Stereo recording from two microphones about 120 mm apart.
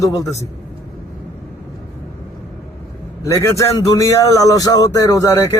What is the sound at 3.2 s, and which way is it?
Speech, 25° left (ahead or behind).